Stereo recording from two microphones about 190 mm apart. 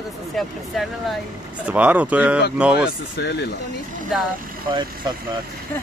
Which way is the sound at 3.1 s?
60° left (ahead or behind).